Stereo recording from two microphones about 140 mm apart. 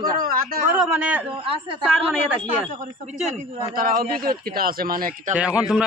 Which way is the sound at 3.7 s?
90° right.